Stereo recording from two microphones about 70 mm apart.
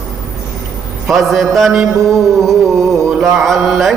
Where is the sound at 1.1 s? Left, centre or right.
Centre.